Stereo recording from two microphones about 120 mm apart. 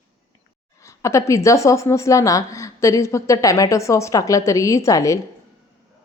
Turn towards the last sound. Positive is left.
turn(degrees=25)  # may be behind; listen again after turning